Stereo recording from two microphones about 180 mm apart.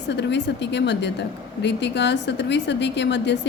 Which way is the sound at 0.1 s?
75° left (ahead or behind).